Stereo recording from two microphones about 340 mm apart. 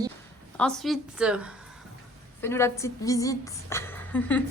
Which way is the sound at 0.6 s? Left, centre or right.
Centre.